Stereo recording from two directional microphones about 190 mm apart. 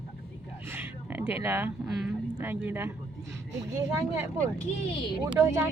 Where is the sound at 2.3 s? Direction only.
10° right (ahead or behind).